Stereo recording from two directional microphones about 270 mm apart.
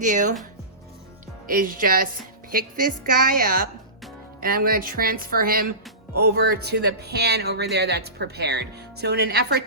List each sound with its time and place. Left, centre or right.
0.0 s speech: right
1.5 s speech: right